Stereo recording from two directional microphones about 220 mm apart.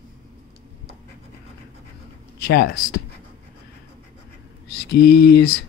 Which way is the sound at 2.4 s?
45° left (ahead or behind).